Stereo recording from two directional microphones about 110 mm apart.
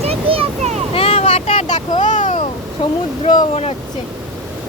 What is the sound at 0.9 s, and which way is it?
Vehicle, 60° left (ahead or behind).